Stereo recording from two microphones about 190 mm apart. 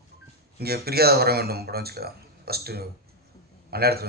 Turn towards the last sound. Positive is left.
turn(degrees=-55)  # may be behind; listen again after turning